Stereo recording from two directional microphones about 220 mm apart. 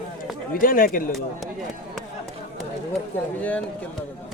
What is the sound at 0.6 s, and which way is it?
Speech, 40° left (ahead or behind).